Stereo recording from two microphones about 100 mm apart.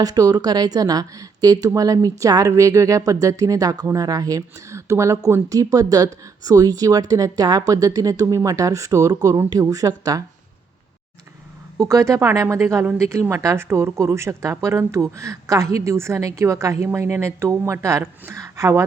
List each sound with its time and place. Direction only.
0.0 s speech: 40° right (ahead or behind)
11.8 s speech: 30° right (ahead or behind)